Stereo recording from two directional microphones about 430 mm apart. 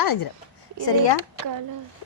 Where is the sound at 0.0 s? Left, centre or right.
Left.